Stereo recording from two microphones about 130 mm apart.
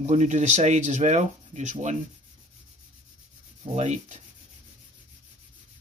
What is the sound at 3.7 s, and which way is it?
Speech, 65° right (ahead or behind).